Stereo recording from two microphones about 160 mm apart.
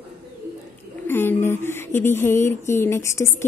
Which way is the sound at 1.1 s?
15° left (ahead or behind).